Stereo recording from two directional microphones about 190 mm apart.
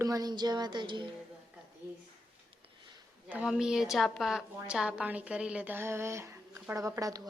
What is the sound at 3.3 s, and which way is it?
A woman's voice, 5° right (ahead or behind).